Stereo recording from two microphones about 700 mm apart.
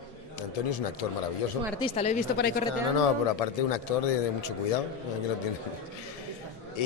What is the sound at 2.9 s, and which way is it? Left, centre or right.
Speech, left.